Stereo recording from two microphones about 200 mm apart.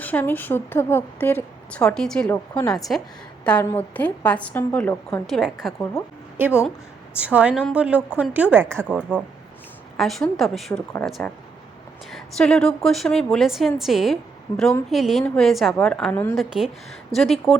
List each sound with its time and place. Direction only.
0.0 s a woman's voice: 10° left (ahead or behind)
2.3 s a woman's voice: 15° left (ahead or behind)
12.1 s a woman's voice: 5° left (ahead or behind)